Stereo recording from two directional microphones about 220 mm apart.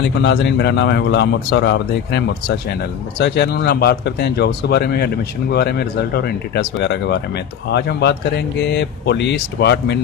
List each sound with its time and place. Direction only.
0.0 s speech: 50° left (ahead or behind)